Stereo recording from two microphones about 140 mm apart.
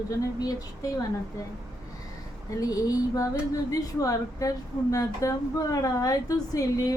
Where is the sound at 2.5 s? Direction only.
25° left (ahead or behind).